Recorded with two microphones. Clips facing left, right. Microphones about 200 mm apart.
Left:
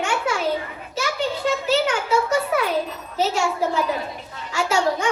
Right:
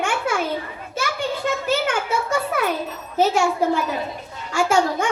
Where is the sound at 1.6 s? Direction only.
50° right (ahead or behind).